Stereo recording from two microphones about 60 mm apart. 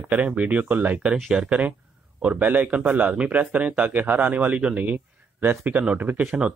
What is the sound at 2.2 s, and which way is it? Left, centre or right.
A man's voice, right.